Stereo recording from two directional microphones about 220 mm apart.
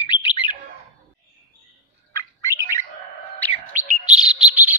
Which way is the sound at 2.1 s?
15° left (ahead or behind).